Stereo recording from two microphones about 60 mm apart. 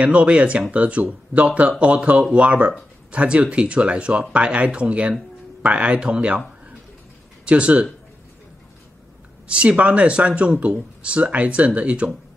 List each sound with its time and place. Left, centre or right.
0.0 s speech: right
7.4 s speech: centre
9.5 s speech: centre